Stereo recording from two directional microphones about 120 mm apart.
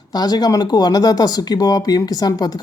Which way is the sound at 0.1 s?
35° left (ahead or behind).